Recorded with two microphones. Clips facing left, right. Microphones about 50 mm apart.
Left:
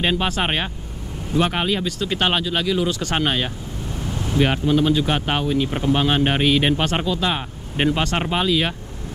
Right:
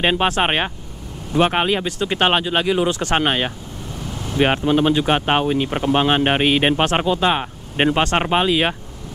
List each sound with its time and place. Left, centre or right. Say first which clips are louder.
0.0 s speech: right 4 dB; right
4.0 s vehicle: left 2 dB; centre
4.4 s speech: right 2 dB; right